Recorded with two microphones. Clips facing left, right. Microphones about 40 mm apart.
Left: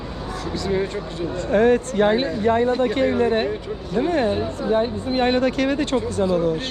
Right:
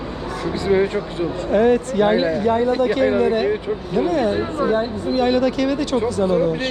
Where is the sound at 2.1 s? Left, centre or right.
Right.